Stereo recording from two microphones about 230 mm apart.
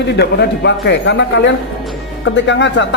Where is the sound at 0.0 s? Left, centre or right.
Left.